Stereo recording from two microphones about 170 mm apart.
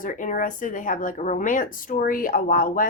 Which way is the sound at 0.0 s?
50° left (ahead or behind).